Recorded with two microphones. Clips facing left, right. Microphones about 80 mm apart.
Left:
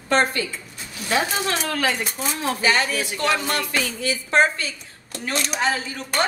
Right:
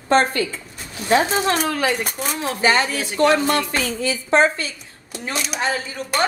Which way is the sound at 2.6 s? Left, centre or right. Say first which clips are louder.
Right 4 dB; right.